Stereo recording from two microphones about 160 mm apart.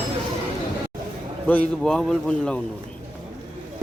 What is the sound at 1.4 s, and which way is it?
Speech, 10° left (ahead or behind).